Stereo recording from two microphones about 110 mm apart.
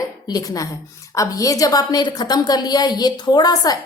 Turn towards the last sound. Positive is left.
turn(degrees=40)  # may be behind; listen again after turning